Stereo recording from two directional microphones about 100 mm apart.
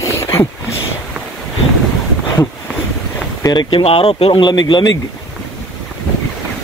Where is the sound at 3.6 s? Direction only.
65° left (ahead or behind).